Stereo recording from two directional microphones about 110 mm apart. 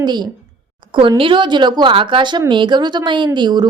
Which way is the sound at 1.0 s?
50° right (ahead or behind).